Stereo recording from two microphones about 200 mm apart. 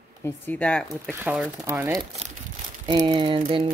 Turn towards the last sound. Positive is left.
turn(degrees=-25)  # may be behind; listen again after turning